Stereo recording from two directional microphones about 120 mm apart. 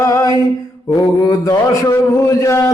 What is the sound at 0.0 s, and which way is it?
Mantra, 30° left (ahead or behind).